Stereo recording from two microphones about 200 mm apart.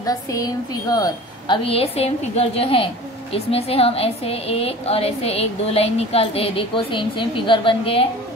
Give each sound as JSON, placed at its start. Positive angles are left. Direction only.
{"t": 0.0, "sound": "a woman's voice", "side_deg": 20}